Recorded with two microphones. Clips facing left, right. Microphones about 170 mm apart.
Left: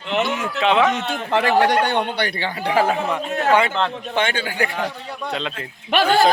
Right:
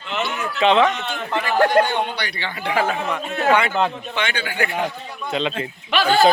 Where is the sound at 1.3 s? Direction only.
80° left; by 2.5 s 55° left (ahead or behind).